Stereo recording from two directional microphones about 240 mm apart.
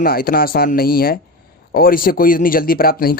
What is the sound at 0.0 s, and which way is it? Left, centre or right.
Speech, left.